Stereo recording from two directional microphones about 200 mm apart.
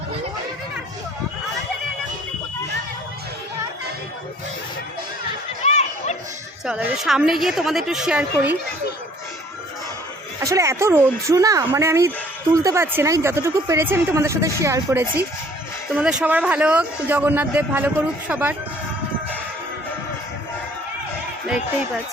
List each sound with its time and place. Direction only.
5.6 s chatter: 35° left (ahead or behind)
6.7 s a woman's voice: 5° right (ahead or behind)
10.4 s a woman's voice: 15° right (ahead or behind)